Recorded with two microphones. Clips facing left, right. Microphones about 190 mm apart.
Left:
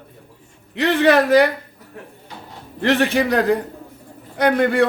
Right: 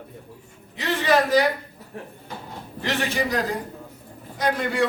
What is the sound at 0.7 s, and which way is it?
Speech, 65° left (ahead or behind).